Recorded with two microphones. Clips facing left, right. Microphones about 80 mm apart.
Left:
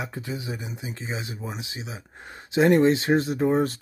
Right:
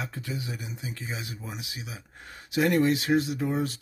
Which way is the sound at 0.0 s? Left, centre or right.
Left.